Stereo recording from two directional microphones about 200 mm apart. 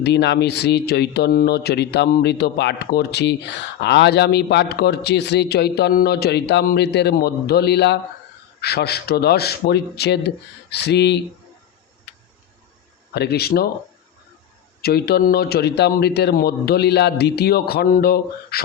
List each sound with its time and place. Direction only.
0.0 s a man's voice: 60° left (ahead or behind)
13.1 s a man's voice: 55° left (ahead or behind)
14.8 s a man's voice: 50° left (ahead or behind)